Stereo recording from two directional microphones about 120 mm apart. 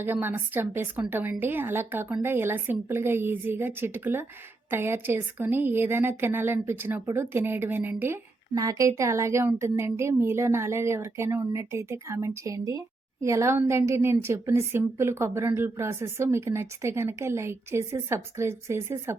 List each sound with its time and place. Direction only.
0.0 s a woman's voice: 15° right (ahead or behind)